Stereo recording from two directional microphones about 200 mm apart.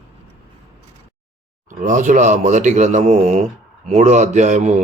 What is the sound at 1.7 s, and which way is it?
Speech, 40° right (ahead or behind).